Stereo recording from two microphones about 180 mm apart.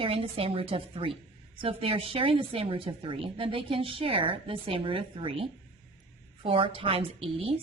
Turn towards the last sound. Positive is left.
turn(degrees=-30)  # may be behind; listen again after turning